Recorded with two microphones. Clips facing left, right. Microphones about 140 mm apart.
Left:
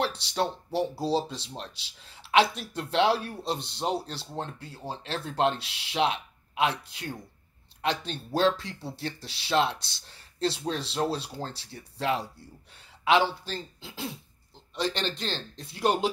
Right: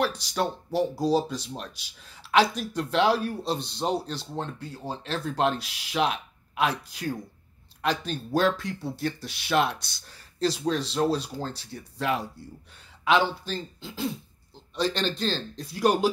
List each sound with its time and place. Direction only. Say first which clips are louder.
0.0 s speech: right 2 dB; 30° left (ahead or behind)
13.5 s speech: right 3 dB; 30° left (ahead or behind)